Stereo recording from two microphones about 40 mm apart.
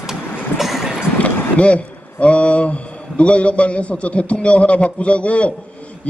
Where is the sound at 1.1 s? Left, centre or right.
Left.